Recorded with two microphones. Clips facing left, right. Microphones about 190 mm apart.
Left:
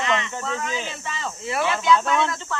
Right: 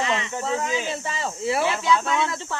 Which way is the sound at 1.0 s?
30° right (ahead or behind).